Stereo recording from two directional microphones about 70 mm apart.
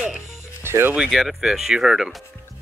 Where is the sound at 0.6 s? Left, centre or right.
Right.